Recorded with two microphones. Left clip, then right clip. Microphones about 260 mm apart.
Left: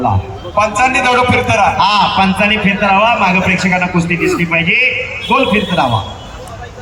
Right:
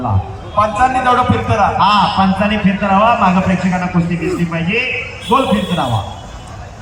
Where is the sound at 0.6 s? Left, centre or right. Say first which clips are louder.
Left 1 dB; left.